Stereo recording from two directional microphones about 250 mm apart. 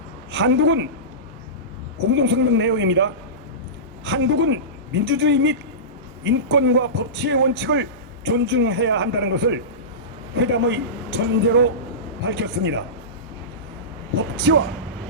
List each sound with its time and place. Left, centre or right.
0.3 s a woman's voice: right
2.0 s a man's voice: right
14.3 s a man's voice: right